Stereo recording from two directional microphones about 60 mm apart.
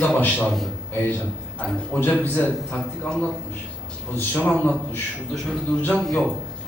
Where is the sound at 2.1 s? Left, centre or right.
Left.